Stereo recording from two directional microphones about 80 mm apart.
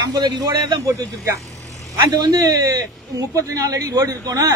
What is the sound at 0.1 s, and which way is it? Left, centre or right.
Speech, right.